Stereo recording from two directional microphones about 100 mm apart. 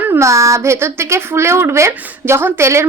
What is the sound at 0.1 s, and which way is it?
Speech, 30° right (ahead or behind).